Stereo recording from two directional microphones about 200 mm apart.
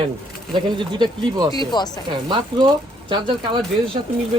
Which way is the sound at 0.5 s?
20° right (ahead or behind).